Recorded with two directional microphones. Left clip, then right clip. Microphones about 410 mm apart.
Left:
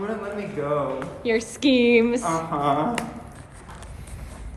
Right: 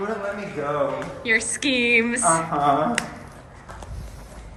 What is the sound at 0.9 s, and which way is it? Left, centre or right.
Speech, centre.